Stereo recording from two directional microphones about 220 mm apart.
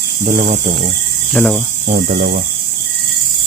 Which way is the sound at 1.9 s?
40° right (ahead or behind).